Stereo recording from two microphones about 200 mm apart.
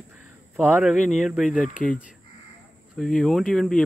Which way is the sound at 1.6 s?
40° left (ahead or behind).